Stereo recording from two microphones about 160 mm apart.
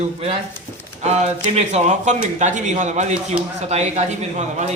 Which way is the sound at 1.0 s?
45° right (ahead or behind).